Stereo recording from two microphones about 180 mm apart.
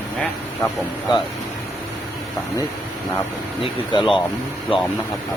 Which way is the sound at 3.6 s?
25° left (ahead or behind).